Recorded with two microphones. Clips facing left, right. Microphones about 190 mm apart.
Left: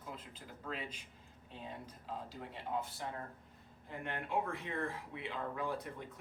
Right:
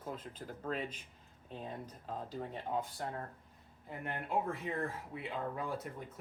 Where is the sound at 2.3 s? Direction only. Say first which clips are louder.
Right 3 dB; 45° right (ahead or behind).